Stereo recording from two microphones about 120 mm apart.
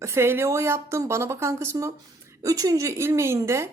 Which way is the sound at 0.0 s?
20° right (ahead or behind).